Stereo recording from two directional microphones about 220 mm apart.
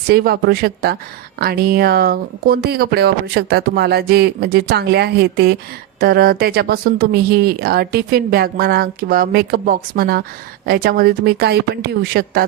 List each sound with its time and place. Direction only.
0.1 s speech: 45° right (ahead or behind)